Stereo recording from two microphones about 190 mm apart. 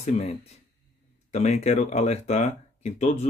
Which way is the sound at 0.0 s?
35° left (ahead or behind).